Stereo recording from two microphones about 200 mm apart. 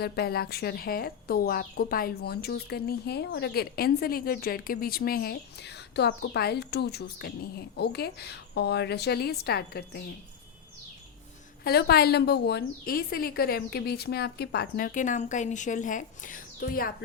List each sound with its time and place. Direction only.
0.0 s speech: 50° left (ahead or behind)
11.6 s speech: 50° left (ahead or behind)